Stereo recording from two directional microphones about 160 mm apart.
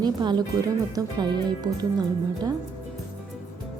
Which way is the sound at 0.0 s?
25° right (ahead or behind).